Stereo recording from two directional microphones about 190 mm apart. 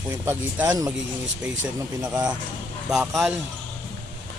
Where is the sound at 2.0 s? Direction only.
20° right (ahead or behind).